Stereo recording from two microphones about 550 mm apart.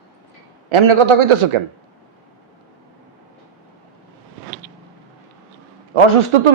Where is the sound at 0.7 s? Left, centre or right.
Right.